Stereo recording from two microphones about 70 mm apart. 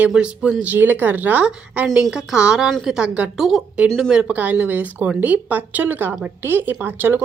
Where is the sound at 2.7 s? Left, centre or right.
Centre.